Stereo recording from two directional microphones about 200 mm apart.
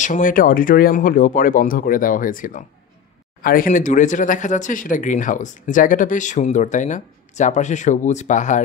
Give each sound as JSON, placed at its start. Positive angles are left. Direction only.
{"t": 0.0, "sound": "speech", "side_deg": 40}